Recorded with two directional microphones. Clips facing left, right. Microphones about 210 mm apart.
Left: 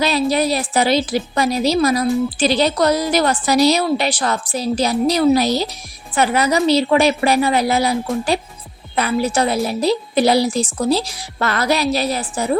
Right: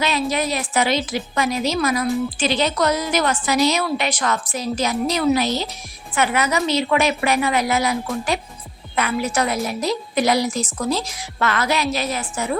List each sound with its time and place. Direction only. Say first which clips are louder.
0.0 s a woman's voice: left 5 dB; 35° left (ahead or behind)
9.0 s a woman's voice: left 4 dB; 35° left (ahead or behind)